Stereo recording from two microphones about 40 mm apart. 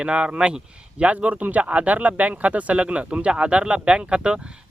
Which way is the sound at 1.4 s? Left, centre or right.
Right.